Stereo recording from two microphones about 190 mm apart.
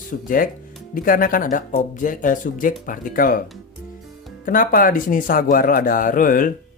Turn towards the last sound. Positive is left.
turn(degrees=45)  # may be behind; listen again after turning